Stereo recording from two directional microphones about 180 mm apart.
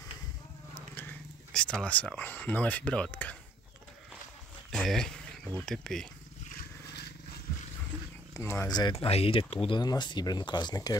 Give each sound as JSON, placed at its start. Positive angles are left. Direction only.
{"t": 0.9, "sound": "speech", "side_deg": 10}
{"t": 4.6, "sound": "speech", "side_deg": 5}
{"t": 6.9, "sound": "vehicle", "side_deg": 65}
{"t": 8.4, "sound": "speech", "side_deg": 15}